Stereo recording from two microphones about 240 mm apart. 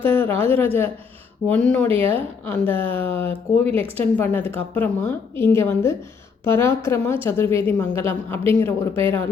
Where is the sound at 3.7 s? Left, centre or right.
Right.